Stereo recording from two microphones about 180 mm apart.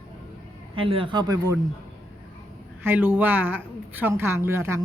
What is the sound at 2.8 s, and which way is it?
Speech, 10° right (ahead or behind).